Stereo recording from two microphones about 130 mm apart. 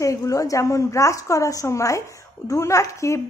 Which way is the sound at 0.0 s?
25° left (ahead or behind).